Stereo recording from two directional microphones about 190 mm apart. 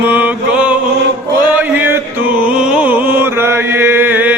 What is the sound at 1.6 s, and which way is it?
Music, 10° right (ahead or behind).